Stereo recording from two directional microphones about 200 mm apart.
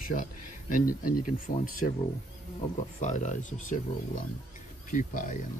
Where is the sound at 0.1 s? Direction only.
40° left (ahead or behind).